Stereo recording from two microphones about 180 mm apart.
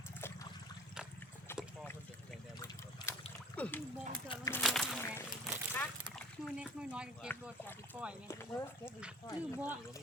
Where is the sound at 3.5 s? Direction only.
10° left (ahead or behind).